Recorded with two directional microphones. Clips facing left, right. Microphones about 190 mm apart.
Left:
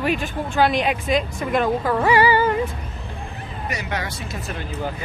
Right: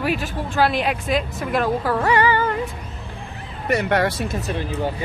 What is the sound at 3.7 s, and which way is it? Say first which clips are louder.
Speech: right 10 dB; 60° right (ahead or behind).